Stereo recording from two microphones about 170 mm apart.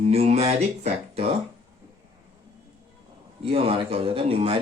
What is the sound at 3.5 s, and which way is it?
Speech, 35° right (ahead or behind).